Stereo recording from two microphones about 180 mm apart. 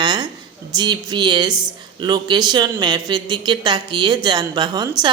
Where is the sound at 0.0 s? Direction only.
25° right (ahead or behind).